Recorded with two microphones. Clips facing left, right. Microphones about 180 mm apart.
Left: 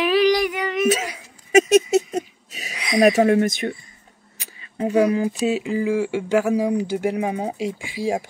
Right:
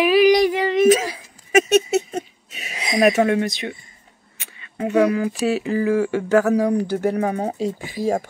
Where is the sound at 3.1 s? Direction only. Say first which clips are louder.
Left 2 dB; 35° left (ahead or behind).